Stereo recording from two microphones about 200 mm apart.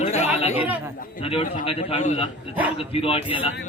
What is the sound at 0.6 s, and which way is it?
Speech, 10° right (ahead or behind).